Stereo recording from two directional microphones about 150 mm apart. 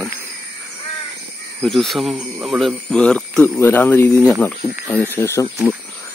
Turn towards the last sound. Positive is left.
turn(degrees=20)  # may be behind; listen again after turning